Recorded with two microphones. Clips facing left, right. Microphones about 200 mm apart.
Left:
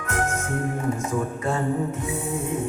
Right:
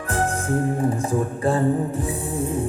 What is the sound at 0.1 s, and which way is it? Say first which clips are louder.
Music: right 4 dB; 35° right (ahead or behind).